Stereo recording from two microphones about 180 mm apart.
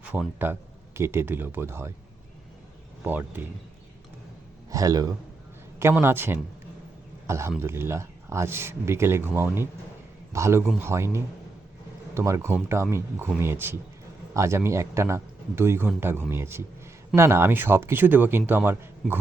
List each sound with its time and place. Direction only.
0.0 s speech: 10° right (ahead or behind)
3.0 s speech: 10° right (ahead or behind)
4.7 s a man's voice: 20° right (ahead or behind)